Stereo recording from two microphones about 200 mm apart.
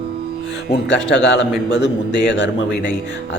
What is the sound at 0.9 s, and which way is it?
A man's voice, 60° left (ahead or behind).